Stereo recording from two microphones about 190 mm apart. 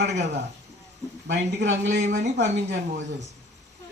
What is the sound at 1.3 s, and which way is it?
Speech, 70° right (ahead or behind).